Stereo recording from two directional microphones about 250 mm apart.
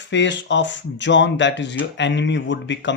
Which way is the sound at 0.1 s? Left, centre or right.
Left.